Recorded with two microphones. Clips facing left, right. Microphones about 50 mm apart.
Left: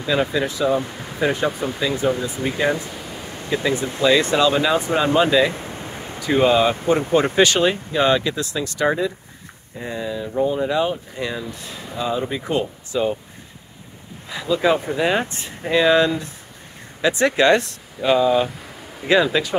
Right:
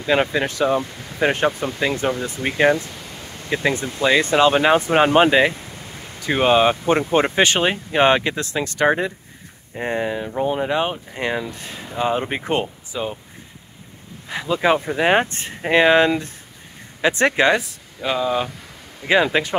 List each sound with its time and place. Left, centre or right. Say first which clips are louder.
0.0 s speech: right 1 dB; right
2.9 s a sound: left 3 dB; centre
3.4 s speech: right 1 dB; right
3.7 s speech: left 2 dB; left
4.0 s speech: right 1 dB; right
5.5 s a sound: left 4 dB; left
6.2 s speech: even; right
9.8 s speech: right 4 dB; right
12.9 s speech: left 5 dB; centre
14.3 s speech: even; right
17.5 s speech: left 2 dB; centre
19.2 s speech: right 1 dB; right